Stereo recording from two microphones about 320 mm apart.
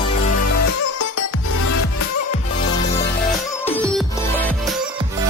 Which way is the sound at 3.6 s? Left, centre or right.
Centre.